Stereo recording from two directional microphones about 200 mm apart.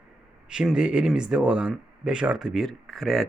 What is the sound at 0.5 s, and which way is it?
Speech, 5° right (ahead or behind).